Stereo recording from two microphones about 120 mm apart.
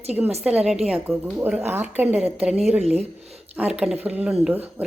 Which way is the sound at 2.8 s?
60° right (ahead or behind).